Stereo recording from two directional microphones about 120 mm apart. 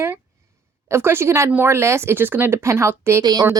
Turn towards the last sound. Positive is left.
turn(degrees=-30)  # may be behind; listen again after turning